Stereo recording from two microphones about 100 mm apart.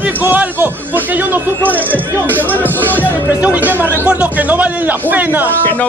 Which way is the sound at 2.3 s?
20° left (ahead or behind).